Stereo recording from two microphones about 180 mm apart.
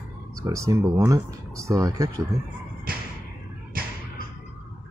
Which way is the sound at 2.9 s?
55° right (ahead or behind).